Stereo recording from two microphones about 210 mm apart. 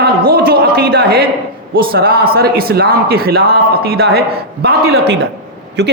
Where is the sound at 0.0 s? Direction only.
45° right (ahead or behind).